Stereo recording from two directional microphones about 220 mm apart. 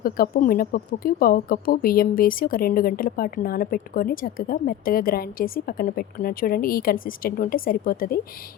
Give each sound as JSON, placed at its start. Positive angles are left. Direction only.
{"t": 0.0, "sound": "speech", "side_deg": 40}